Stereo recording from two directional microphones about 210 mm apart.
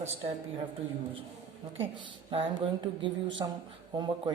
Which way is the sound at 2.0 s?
25° right (ahead or behind).